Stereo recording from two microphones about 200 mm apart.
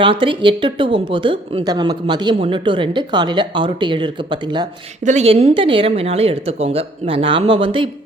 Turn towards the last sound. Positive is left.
turn(degrees=-25)  # may be behind; listen again after turning